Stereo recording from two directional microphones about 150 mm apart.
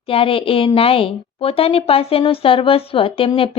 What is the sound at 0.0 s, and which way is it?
A woman's voice, 40° left (ahead or behind).